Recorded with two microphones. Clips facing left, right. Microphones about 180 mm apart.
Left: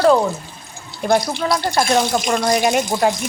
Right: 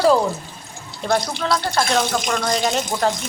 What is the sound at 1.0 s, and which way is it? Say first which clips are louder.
Speech: left 4 dB; 10° left (ahead or behind).